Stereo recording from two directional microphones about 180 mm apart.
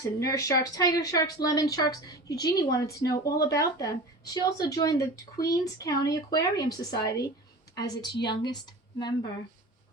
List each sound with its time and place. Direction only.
0.2 s a woman's voice: 20° left (ahead or behind)